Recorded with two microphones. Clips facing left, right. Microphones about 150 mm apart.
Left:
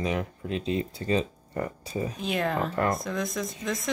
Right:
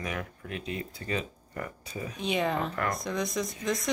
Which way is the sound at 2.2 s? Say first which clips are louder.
Right 1 dB; centre (ahead or behind).